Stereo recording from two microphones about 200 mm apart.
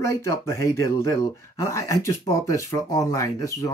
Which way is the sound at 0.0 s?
15° left (ahead or behind).